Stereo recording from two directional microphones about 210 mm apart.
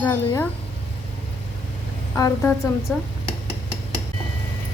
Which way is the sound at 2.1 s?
10° left (ahead or behind).